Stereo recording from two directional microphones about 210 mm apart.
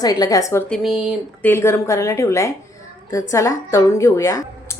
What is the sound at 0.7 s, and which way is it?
Speech, centre (ahead or behind).